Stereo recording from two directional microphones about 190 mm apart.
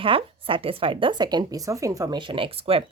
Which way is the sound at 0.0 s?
30° right (ahead or behind).